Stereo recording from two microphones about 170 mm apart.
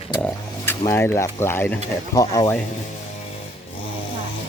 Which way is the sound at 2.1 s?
20° left (ahead or behind).